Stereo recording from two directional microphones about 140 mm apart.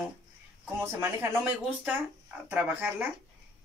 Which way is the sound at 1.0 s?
15° right (ahead or behind).